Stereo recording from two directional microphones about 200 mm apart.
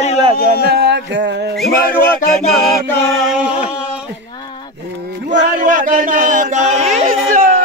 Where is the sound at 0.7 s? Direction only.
55° right (ahead or behind).